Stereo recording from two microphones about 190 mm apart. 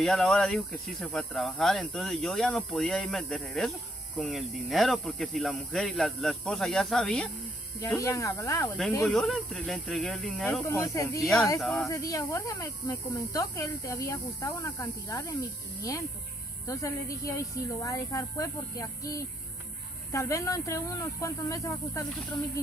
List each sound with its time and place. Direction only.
0.0 s speech: centre (ahead or behind)
7.8 s speech: 15° left (ahead or behind)
9.0 s speech: centre (ahead or behind)
10.6 s speech: 15° left (ahead or behind)
11.6 s speech: centre (ahead or behind)
11.9 s speech: 15° left (ahead or behind)